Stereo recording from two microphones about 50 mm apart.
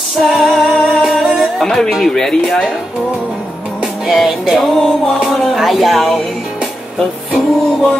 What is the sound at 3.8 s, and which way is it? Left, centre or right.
Music, centre.